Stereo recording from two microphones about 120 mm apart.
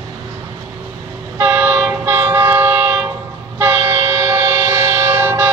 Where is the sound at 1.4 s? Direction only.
20° right (ahead or behind).